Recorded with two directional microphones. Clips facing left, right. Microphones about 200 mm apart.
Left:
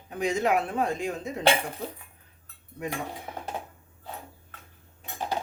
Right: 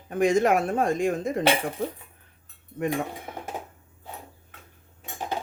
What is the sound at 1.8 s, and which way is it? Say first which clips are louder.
Dishes: right 6 dB; 60° right (ahead or behind).